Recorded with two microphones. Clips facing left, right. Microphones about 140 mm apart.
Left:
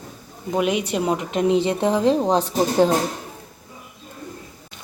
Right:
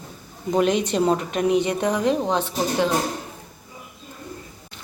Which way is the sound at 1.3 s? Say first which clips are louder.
Left 1 dB; 25° left (ahead or behind).